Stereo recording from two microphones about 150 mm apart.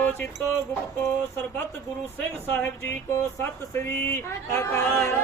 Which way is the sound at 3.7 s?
15° left (ahead or behind).